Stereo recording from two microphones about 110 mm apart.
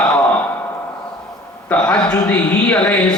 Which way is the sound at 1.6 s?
10° left (ahead or behind).